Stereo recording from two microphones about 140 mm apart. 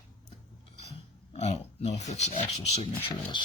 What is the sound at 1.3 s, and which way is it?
Speech, 50° left (ahead or behind).